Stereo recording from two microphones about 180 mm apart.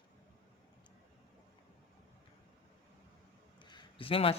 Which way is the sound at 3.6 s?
25° left (ahead or behind).